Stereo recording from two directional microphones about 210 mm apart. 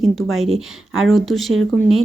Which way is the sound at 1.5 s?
70° right (ahead or behind).